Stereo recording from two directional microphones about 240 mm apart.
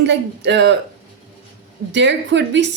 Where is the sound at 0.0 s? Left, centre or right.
Right.